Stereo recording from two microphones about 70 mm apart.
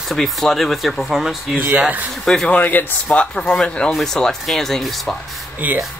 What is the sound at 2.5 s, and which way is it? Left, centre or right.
Speech, left.